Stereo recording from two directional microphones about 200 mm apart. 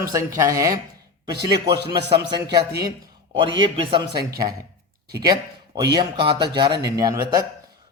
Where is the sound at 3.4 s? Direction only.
25° right (ahead or behind).